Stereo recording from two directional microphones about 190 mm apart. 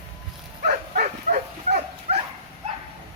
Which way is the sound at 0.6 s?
45° right (ahead or behind).